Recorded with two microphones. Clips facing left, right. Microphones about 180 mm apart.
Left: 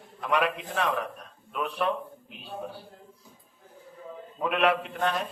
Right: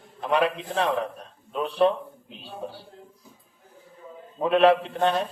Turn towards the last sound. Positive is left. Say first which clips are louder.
# right 5 dB
turn(degrees=-30)  # may be behind; listen again after turning